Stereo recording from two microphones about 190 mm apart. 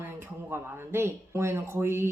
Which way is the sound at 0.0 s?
10° right (ahead or behind).